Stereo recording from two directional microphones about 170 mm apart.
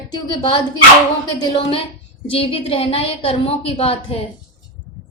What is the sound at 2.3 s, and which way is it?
A woman's voice, 35° left (ahead or behind).